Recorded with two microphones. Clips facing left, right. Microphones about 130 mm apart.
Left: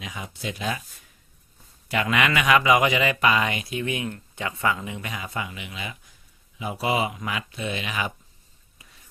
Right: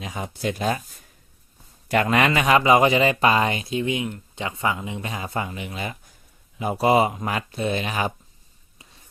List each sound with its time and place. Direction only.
0.0 s speech: 40° right (ahead or behind)
1.9 s speech: 40° right (ahead or behind)